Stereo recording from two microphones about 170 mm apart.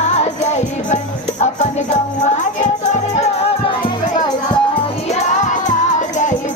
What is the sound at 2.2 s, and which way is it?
Music, 45° left (ahead or behind).